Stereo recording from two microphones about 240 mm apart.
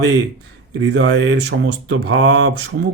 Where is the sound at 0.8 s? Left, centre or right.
Right.